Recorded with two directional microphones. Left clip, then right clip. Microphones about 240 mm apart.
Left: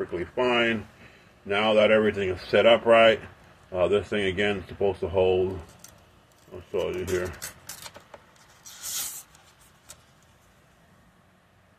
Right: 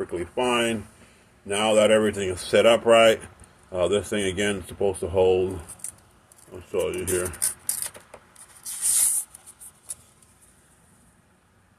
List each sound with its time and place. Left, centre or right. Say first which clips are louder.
0.1 s speech: even; right
6.7 s speech: right 2 dB; right